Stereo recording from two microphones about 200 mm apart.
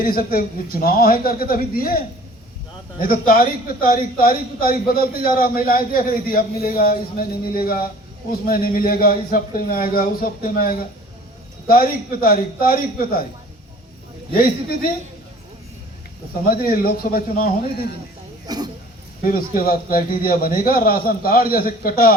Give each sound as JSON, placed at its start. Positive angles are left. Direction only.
{"t": 0.0, "sound": "a man's voice", "side_deg": 45}
{"t": 14.3, "sound": "a man's voice", "side_deg": 45}
{"t": 16.5, "sound": "a man's voice", "side_deg": 45}
{"t": 18.4, "sound": "speech", "side_deg": -20}
{"t": 19.2, "sound": "a man's voice", "side_deg": 45}